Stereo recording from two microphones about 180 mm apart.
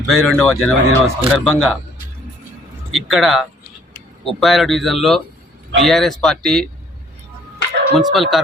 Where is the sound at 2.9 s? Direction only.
Centre (ahead or behind).